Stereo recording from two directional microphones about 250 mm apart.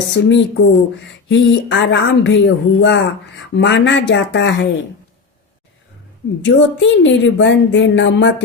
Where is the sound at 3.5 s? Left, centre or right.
Left.